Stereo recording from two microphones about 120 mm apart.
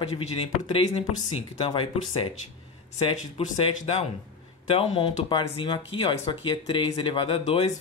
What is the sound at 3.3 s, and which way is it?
Speech, 55° left (ahead or behind).